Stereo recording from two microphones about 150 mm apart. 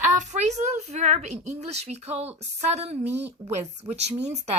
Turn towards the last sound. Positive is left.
turn(degrees=-45)  # may be behind; listen again after turning